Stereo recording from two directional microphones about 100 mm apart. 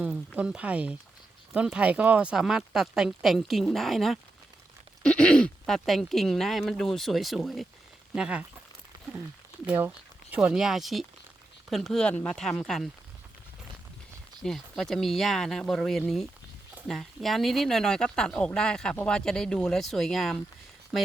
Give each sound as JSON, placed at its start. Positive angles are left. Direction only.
{"t": 0.0, "sound": "speech", "side_deg": -15}
{"t": 9.6, "sound": "speech", "side_deg": -20}
{"t": 10.3, "sound": "speech", "side_deg": -10}
{"t": 14.4, "sound": "speech", "side_deg": 5}